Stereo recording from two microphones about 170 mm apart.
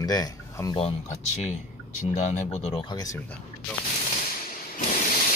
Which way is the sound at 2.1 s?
40° left (ahead or behind).